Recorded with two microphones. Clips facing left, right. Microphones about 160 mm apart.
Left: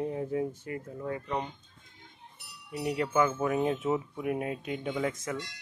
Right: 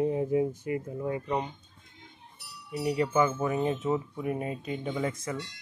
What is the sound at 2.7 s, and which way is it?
Speech, centre (ahead or behind).